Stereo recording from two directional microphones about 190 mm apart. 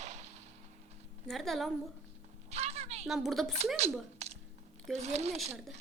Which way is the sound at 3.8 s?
35° right (ahead or behind).